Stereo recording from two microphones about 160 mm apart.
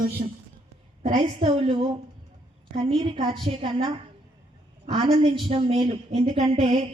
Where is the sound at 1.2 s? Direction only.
35° right (ahead or behind).